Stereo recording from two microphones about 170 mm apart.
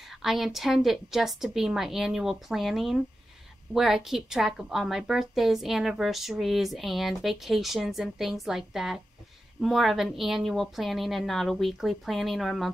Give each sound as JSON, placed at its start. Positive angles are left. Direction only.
{"t": 0.2, "sound": "a woman's voice", "side_deg": 0}